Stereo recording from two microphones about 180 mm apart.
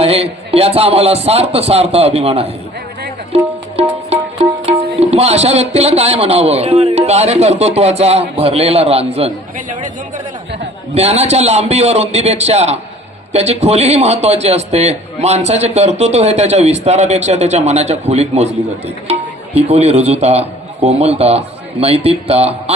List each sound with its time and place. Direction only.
0.0 s a man's voice: 35° right (ahead or behind)
3.3 s music: 35° right (ahead or behind)
9.6 s speech: 45° right (ahead or behind)
10.9 s a man's voice: 35° right (ahead or behind)
19.5 s a man's voice: 35° right (ahead or behind)